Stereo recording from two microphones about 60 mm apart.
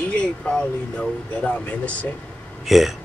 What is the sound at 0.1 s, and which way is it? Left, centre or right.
Speech, centre.